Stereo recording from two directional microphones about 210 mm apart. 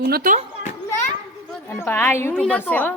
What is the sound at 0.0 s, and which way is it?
Speech, 45° right (ahead or behind).